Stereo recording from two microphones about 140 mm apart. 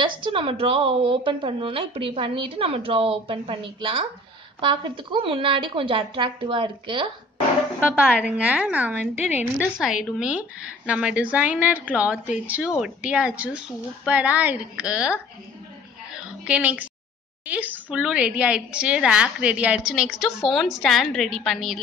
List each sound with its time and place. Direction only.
0.0 s a woman's voice: 35° right (ahead or behind)
7.9 s a woman's voice: 10° right (ahead or behind)
16.4 s a woman's voice: 10° right (ahead or behind)